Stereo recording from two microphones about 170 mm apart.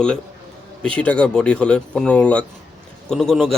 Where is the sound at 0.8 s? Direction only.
5° left (ahead or behind).